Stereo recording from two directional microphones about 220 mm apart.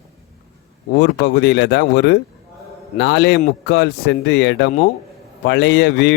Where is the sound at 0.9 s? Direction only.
45° left (ahead or behind).